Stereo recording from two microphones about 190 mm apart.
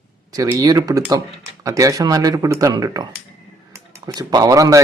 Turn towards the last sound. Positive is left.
turn(degrees=-15)  # may be behind; listen again after turning